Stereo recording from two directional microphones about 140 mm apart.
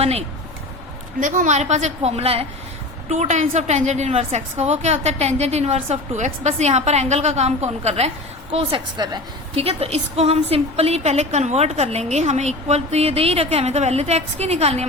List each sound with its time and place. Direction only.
0.0 s a woman's voice: 45° right (ahead or behind)
1.2 s a woman's voice: 65° right (ahead or behind); by 8.1 s 50° right (ahead or behind)
8.5 s a woman's voice: 35° right (ahead or behind)
9.6 s a woman's voice: 45° right (ahead or behind)